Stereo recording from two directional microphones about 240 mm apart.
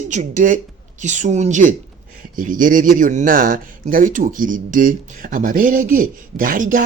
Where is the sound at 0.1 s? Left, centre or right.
Right.